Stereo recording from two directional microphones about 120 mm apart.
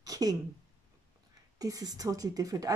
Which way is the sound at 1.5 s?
30° right (ahead or behind).